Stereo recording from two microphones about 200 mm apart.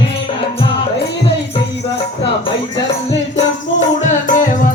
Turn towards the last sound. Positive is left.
turn(degrees=40)  # may be behind; listen again after turning